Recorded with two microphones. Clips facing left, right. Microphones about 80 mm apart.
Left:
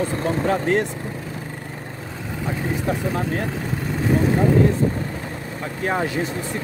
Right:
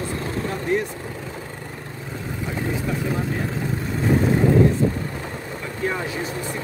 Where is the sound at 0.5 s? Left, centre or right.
Left.